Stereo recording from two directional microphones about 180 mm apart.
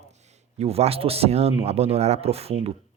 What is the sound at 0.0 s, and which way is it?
A man's voice, 40° right (ahead or behind).